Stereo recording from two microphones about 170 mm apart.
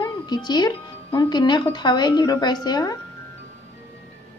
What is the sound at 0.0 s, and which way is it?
Speech, 25° left (ahead or behind).